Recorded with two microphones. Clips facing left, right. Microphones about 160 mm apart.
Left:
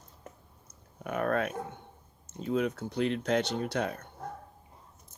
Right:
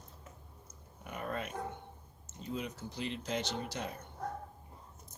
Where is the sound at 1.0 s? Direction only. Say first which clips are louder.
Left 10 dB; 65° left (ahead or behind).